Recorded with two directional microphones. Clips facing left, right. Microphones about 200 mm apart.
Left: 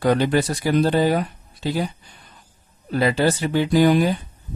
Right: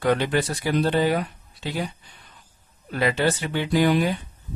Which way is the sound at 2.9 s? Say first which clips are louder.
Left 3 dB; 35° left (ahead or behind).